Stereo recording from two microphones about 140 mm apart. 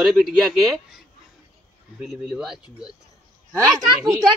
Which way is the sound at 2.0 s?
5° right (ahead or behind).